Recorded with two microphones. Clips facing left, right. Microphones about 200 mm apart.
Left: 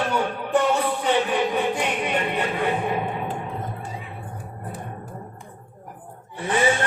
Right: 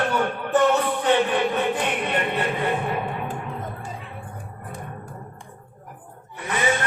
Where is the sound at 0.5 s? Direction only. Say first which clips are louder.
Right 1 dB; 10° left (ahead or behind).